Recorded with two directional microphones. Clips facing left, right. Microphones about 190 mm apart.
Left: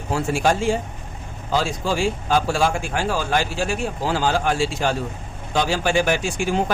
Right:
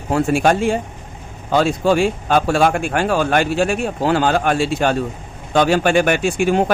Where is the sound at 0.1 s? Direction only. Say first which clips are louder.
Right 5 dB; 60° right (ahead or behind).